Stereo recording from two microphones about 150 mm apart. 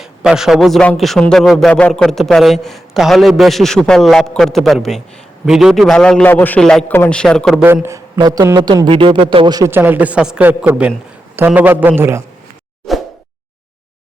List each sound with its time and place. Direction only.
0.0 s a man's voice: 5° right (ahead or behind)
7.6 s a man's voice: 15° right (ahead or behind); by 9.6 s 35° right (ahead or behind)
9.6 s a man's voice: 15° right (ahead or behind)
12.9 s a sound: centre (ahead or behind)